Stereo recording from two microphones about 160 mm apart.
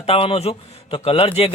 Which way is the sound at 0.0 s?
35° left (ahead or behind).